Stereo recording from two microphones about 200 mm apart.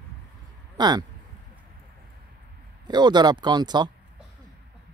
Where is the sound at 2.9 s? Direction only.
20° right (ahead or behind).